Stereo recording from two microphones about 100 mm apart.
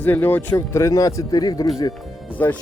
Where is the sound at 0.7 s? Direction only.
30° left (ahead or behind).